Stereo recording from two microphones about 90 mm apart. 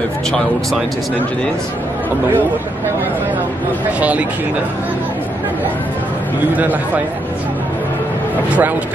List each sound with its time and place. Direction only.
4.0 s speech: 15° right (ahead or behind)
6.5 s speech: 20° right (ahead or behind)
8.5 s speech: 20° right (ahead or behind)